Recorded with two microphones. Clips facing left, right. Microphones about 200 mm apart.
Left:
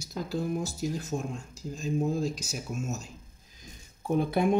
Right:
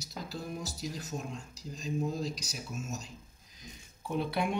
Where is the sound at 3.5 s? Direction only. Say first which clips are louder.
Even; 45° left (ahead or behind).